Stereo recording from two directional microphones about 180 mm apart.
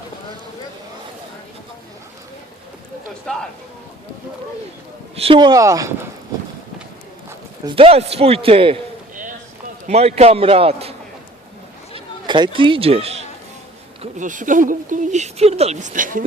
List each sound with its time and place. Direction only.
3.3 s speech: 5° left (ahead or behind)
5.1 s speech: 30° right (ahead or behind)
7.6 s a man's voice: 30° right (ahead or behind)
9.8 s a man's voice: 35° right (ahead or behind)
11.9 s speech: 25° right (ahead or behind)
14.0 s speech: 45° right (ahead or behind)